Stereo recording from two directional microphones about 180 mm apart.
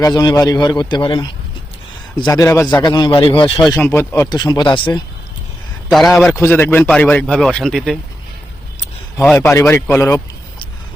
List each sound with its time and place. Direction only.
0.0 s a man's voice: 20° left (ahead or behind)
3.8 s speech: 10° left (ahead or behind)
4.3 s a man's voice: 25° left (ahead or behind)
5.9 s speech: centre (ahead or behind)
9.2 s speech: 5° left (ahead or behind)